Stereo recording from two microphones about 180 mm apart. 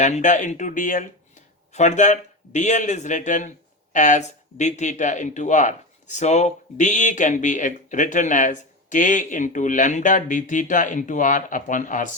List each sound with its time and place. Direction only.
0.0 s speech: 45° left (ahead or behind)